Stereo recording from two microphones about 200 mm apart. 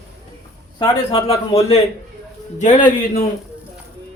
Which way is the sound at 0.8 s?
20° left (ahead or behind).